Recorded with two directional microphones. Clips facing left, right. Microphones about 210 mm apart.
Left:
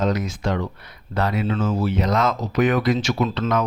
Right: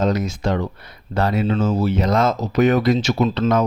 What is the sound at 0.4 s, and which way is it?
Speech, 30° right (ahead or behind).